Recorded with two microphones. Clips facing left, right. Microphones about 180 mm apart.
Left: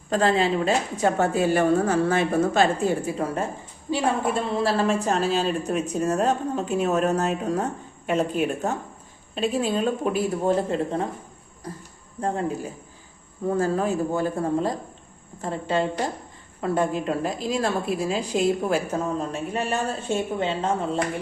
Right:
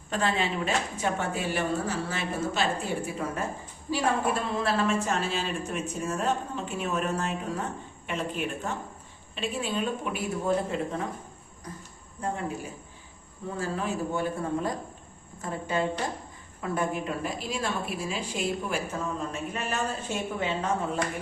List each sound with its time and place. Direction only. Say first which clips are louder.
0.1 s a woman's voice: left 7 dB; 35° left (ahead or behind)
3.9 s a woman's voice: left 3 dB; 30° left (ahead or behind)
13.6 s a woman's voice: left 6 dB; 40° left (ahead or behind)